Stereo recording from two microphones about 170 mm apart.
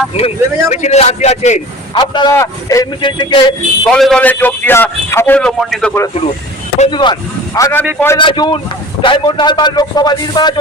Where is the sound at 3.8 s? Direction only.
5° left (ahead or behind).